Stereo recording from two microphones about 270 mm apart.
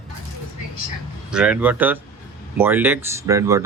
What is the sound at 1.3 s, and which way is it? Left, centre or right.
Speech, centre.